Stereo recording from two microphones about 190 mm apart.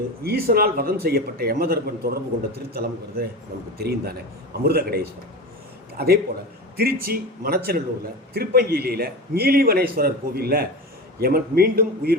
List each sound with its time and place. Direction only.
0.2 s a man's voice: 55° right (ahead or behind)